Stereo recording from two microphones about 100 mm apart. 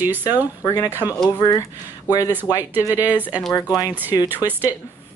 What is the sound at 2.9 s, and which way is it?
A woman's voice, 15° right (ahead or behind).